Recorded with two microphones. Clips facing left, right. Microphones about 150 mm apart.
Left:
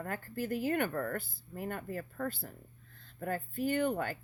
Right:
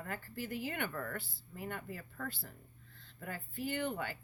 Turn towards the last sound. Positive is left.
turn(degrees=45)  # may be behind; listen again after turning